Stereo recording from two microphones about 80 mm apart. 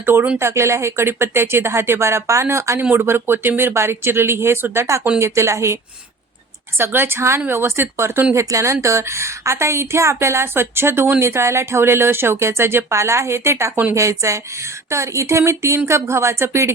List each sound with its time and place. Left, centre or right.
0.0 s speech: right
6.7 s speech: right